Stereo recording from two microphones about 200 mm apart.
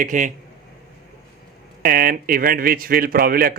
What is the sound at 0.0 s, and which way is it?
Speech, 40° right (ahead or behind).